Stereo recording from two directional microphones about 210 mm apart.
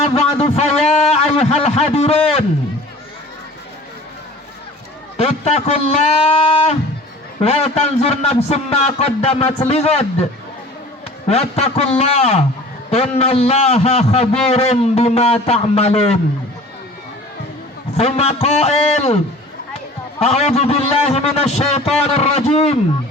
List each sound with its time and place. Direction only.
0.0 s a sound: 30° left (ahead or behind)
5.1 s a man's voice: 30° left (ahead or behind)
11.3 s a man's voice: 30° left (ahead or behind)
17.9 s a man's voice: 30° left (ahead or behind)